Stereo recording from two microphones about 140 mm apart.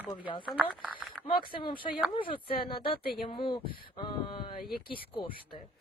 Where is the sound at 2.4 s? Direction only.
90° left.